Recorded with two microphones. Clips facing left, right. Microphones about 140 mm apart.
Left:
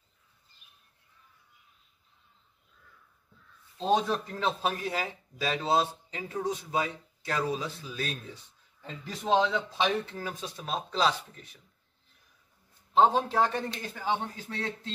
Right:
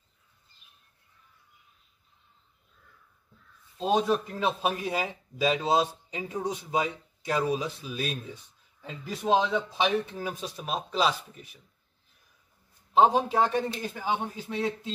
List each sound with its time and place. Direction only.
3.7 s speech: 10° right (ahead or behind)
12.9 s speech: 10° right (ahead or behind)